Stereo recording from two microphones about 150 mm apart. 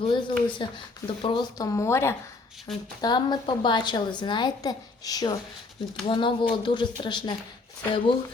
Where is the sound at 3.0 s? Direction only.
30° left (ahead or behind).